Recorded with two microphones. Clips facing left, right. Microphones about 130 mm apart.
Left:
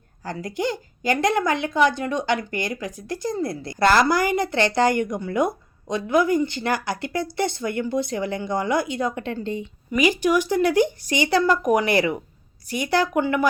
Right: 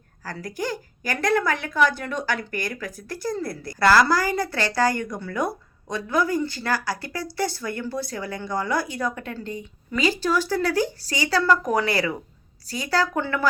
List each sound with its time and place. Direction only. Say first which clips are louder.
0.3 s a woman's voice: left 3 dB; 20° left (ahead or behind)